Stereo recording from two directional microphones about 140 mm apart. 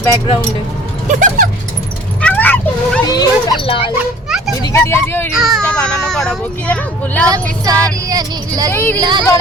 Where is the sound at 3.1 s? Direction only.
35° left (ahead or behind).